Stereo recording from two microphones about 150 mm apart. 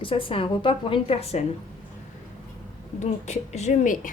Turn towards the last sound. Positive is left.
turn(degrees=60)  # may be behind; listen again after turning